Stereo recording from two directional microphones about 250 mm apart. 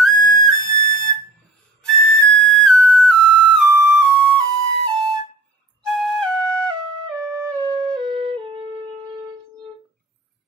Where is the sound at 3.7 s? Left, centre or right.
Centre.